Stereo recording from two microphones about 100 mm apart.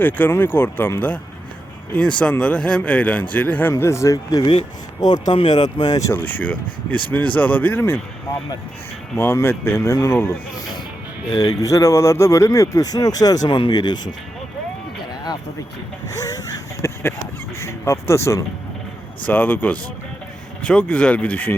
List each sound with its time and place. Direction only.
0.0 s speech: 20° left (ahead or behind)
3.7 s speech: 25° left (ahead or behind)
6.1 s speech: 15° left (ahead or behind)
9.1 s speech: 25° left (ahead or behind)
11.3 s speech: 40° left (ahead or behind)
13.5 s speech: 55° left (ahead or behind)
16.0 s a sound: 35° left (ahead or behind)
17.6 s speech: 30° left (ahead or behind)
19.3 s speech: 15° left (ahead or behind)